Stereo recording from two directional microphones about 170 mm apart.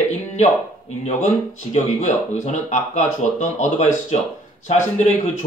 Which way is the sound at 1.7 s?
45° left (ahead or behind).